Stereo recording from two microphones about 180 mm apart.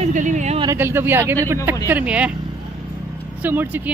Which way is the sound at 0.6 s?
15° right (ahead or behind).